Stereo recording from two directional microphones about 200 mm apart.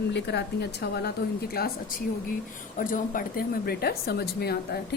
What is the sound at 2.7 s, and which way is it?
A woman's voice, 45° left (ahead or behind).